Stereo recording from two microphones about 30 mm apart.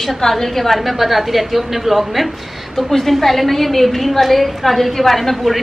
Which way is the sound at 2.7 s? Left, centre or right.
Centre.